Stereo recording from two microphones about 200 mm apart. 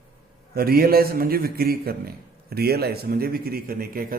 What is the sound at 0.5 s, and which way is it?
A man's voice, 50° right (ahead or behind).